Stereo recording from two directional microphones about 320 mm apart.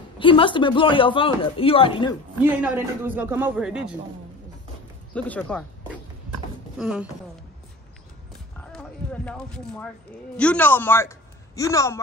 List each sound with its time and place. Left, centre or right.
0.2 s speech: centre
2.6 s speech: centre
5.1 s speech: centre
6.8 s speech: centre
8.7 s clip-clop: centre
10.3 s speech: centre